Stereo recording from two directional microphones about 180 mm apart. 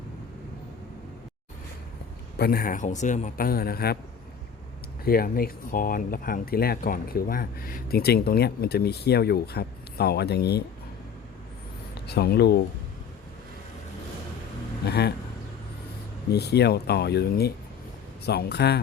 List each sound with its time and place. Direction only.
2.4 s a man's voice: 55° left (ahead or behind)
5.0 s speech: 55° left (ahead or behind)
12.0 s speech: 65° left (ahead or behind)
14.8 s vehicle: 65° left (ahead or behind)
16.3 s speech: 65° left (ahead or behind)